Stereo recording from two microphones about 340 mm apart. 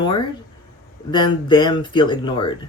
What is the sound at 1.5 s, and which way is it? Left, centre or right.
Speech, centre.